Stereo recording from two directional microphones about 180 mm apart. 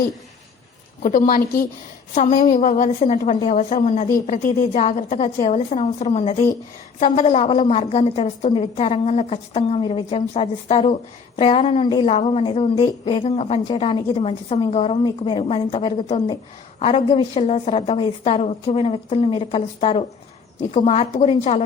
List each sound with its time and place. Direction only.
1.0 s a woman's voice: 45° left (ahead or behind)